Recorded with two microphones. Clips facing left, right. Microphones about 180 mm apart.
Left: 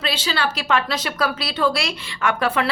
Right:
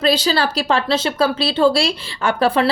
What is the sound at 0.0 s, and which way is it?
Speech, 40° right (ahead or behind).